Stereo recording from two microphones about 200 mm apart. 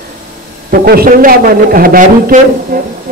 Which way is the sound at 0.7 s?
50° right (ahead or behind).